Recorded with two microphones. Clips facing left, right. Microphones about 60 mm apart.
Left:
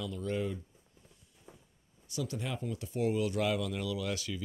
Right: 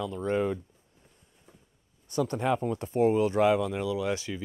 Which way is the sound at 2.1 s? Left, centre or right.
Right.